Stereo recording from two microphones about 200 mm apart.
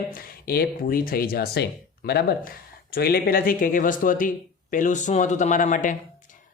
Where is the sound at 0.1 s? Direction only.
50° left (ahead or behind).